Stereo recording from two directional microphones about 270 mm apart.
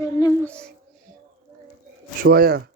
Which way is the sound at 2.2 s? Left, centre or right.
Right.